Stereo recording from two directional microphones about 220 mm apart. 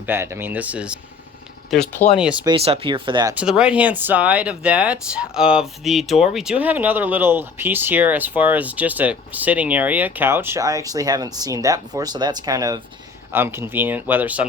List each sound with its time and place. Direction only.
0.0 s speech: 10° right (ahead or behind)
2.5 s speech: 25° right (ahead or behind)
3.3 s speech: 5° right (ahead or behind)